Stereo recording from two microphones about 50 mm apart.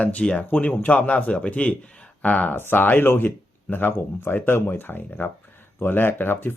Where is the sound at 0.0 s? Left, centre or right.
Left.